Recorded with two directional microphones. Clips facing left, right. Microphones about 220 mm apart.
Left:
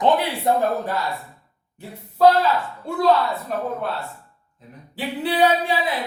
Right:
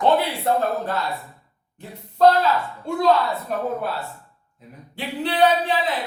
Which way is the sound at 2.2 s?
5° left (ahead or behind).